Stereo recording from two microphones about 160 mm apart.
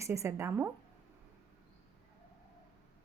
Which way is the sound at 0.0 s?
20° right (ahead or behind).